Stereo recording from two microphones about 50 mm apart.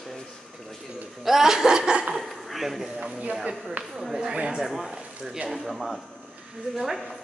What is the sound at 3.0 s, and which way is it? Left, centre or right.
Speech, centre.